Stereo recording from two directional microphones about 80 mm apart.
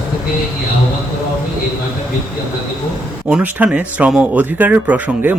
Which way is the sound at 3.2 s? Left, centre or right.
Centre.